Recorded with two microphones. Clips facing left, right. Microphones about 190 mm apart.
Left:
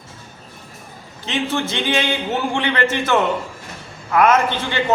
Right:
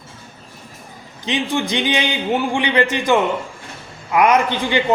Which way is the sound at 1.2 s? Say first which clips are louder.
Right 1 dB; 15° right (ahead or behind).